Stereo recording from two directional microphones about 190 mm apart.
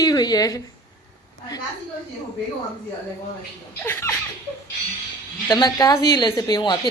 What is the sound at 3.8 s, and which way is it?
Speech, 10° left (ahead or behind).